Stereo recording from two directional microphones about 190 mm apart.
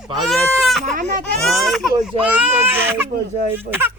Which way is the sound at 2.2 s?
10° right (ahead or behind).